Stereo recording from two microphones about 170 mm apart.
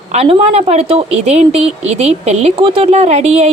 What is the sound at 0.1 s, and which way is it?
Speech, 35° right (ahead or behind).